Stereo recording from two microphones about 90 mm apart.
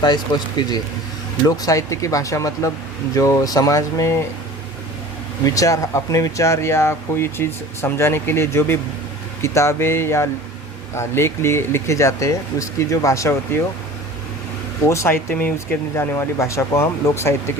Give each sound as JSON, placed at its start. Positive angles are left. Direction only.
{"t": 0.0, "sound": "speech", "side_deg": 50}
{"t": 1.5, "sound": "speech", "side_deg": 40}
{"t": 5.5, "sound": "speech", "side_deg": 40}
{"t": 14.8, "sound": "speech", "side_deg": 30}